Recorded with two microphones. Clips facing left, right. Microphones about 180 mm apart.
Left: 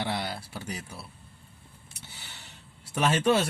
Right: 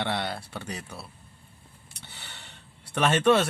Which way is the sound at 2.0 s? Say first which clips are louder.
Right 2 dB; 60° right (ahead or behind).